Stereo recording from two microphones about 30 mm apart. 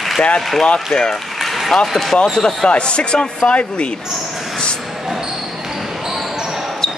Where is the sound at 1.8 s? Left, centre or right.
Centre.